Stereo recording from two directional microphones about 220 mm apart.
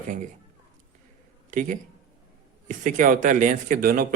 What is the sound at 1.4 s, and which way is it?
A man's voice, 35° right (ahead or behind).